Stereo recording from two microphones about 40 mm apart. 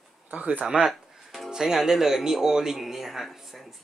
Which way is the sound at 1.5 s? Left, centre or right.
Centre.